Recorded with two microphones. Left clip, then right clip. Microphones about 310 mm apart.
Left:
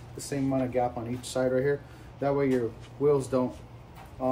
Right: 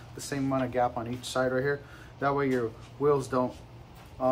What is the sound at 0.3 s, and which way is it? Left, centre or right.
Speech, right.